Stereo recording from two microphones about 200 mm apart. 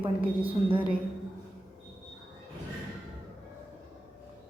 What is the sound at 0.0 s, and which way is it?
Speech, 25° right (ahead or behind).